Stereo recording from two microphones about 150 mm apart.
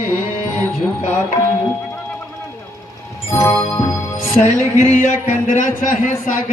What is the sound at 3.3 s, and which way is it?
Music, 20° left (ahead or behind).